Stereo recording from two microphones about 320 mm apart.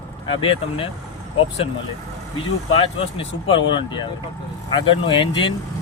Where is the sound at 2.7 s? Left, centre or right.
Centre.